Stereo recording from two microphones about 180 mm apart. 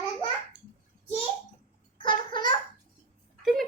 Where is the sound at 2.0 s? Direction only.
25° left (ahead or behind).